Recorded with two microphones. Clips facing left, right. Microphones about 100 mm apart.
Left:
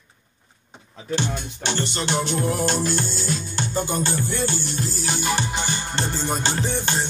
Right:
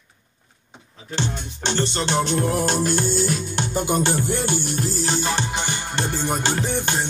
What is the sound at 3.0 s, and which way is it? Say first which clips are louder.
Music: right 5 dB; 55° right (ahead or behind).